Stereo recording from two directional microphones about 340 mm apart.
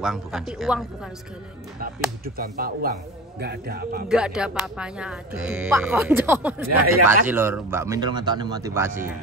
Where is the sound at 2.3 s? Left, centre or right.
Right.